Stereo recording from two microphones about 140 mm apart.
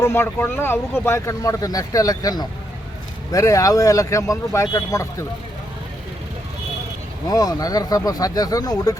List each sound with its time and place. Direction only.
0.0 s speech: 15° left (ahead or behind)
7.3 s speech: 25° left (ahead or behind)